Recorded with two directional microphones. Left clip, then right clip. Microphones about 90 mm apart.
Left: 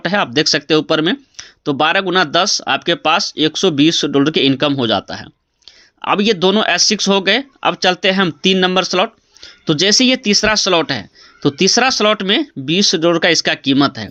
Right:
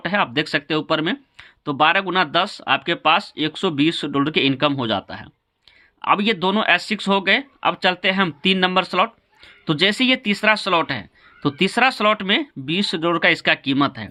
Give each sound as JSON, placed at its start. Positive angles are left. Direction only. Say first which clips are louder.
{"t": 0.0, "sound": "speech", "louder": "left 5 dB", "side_deg": 35}